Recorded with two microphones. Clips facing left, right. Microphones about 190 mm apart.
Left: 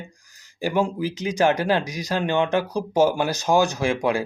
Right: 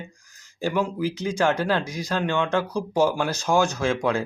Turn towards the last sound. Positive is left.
turn(degrees=15)  # may be behind; listen again after turning